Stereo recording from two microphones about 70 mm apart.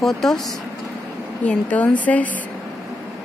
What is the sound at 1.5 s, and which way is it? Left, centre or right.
Speech, centre.